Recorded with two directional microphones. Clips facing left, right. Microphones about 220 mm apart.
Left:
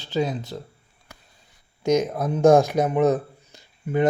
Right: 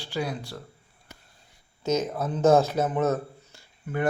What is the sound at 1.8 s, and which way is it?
Speech, 15° left (ahead or behind).